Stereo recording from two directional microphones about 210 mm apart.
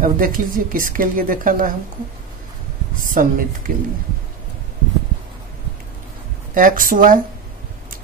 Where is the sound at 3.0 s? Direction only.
40° right (ahead or behind).